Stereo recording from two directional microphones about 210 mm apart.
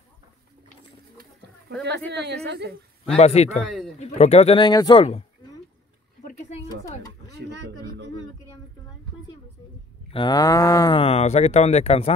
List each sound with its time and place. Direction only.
1.9 s speech: 50° right (ahead or behind)
3.2 s moo: 30° left (ahead or behind)
6.2 s a sound: 35° left (ahead or behind)
10.1 s moo: 20° left (ahead or behind)